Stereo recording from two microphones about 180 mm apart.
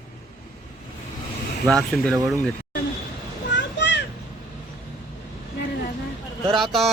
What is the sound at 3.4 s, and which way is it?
Children playing, 80° left.